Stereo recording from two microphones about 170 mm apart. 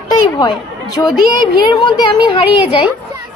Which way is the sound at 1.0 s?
20° left (ahead or behind).